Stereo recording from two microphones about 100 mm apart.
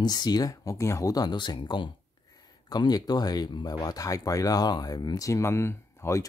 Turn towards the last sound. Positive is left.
turn(degrees=25)  # may be behind; listen again after turning